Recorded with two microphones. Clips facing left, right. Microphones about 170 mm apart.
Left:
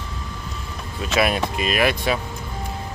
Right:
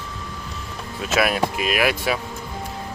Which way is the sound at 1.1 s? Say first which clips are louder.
Even; 5° right (ahead or behind).